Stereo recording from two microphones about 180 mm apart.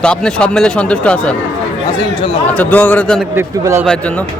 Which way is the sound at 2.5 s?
10° left (ahead or behind).